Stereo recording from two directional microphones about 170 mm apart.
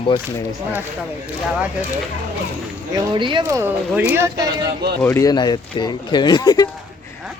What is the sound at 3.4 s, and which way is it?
Speech, 15° right (ahead or behind).